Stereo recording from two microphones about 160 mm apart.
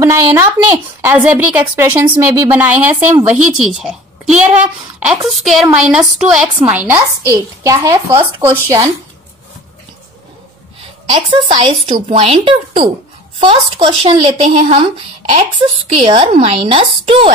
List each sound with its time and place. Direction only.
0.0 s a woman's voice: 15° right (ahead or behind)
11.1 s speech: 30° right (ahead or behind)
16.0 s speech: 40° right (ahead or behind)